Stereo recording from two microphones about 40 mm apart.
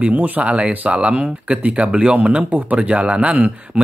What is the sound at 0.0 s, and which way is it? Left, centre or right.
Speech, right.